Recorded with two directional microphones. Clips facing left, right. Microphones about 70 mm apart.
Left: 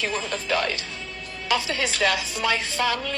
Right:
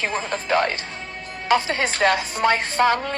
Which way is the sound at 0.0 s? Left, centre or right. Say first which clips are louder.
Right 2 dB; right.